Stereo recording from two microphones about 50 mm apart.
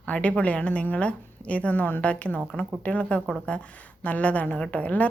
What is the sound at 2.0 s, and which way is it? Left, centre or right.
Speech, left.